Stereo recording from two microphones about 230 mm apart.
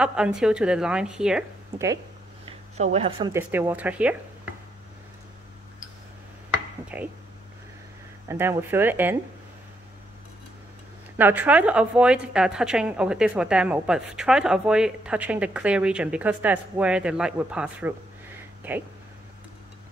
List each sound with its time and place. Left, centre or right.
0.0 s a woman's voice: centre
2.4 s speech: right
3.3 s speech: centre
6.9 s speech: centre
8.3 s speech: centre
11.1 s a woman's voice: centre